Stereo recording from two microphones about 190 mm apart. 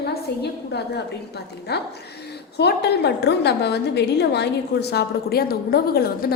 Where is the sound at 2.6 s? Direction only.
60° left (ahead or behind).